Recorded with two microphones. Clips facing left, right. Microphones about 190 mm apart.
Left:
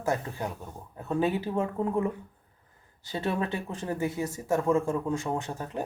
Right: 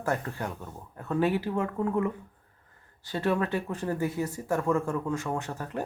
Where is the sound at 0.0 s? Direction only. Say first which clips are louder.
Left 1 dB; 15° left (ahead or behind).